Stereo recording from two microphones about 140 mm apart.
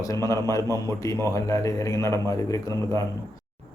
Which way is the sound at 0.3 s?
20° left (ahead or behind).